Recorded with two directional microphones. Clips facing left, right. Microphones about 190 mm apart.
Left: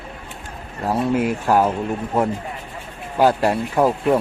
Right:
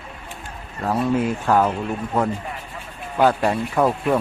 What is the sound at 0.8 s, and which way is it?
Speech, 10° left (ahead or behind).